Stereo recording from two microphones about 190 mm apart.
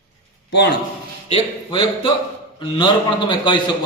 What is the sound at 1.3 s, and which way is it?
A man's voice, 25° left (ahead or behind).